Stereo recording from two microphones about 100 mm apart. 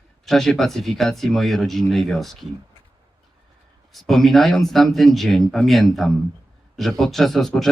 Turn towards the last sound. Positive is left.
turn(degrees=0)  # may be behind; listen again after turning